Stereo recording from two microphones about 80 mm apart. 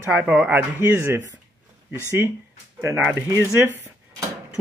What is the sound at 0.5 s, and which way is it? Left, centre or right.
Speech, right.